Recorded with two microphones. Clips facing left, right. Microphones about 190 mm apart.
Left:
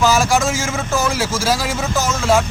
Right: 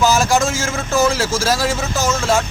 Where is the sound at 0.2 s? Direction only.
15° left (ahead or behind).